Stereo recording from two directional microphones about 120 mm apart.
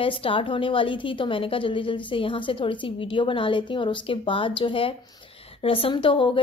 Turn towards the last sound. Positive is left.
turn(degrees=45)  # may be behind; listen again after turning